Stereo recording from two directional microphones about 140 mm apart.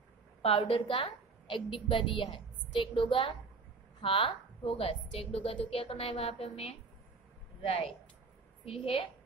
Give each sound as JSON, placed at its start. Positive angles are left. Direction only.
{"t": 0.4, "sound": "a woman's voice", "side_deg": 45}